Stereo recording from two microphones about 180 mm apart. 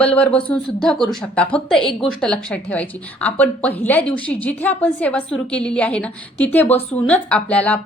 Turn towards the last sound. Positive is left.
turn(degrees=10)  # may be behind; listen again after turning